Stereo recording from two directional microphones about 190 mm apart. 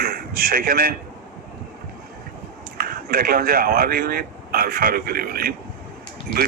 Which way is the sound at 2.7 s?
50° right (ahead or behind).